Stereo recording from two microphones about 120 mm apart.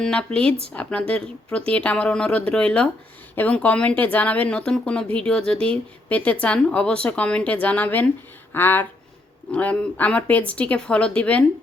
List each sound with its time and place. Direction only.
0.0 s speech: 10° left (ahead or behind)